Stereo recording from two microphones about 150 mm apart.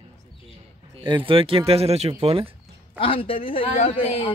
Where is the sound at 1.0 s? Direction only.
35° right (ahead or behind).